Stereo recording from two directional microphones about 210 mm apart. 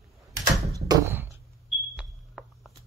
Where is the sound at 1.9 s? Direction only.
Centre (ahead or behind).